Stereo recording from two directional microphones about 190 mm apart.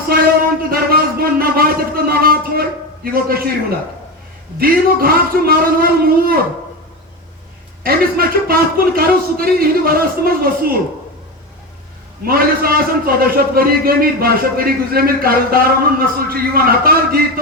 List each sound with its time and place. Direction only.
0.1 s a sound: 50° right (ahead or behind)
4.6 s a man's voice: 50° right (ahead or behind)
7.9 s a man's voice: 50° right (ahead or behind)
12.2 s a man's voice: 50° right (ahead or behind)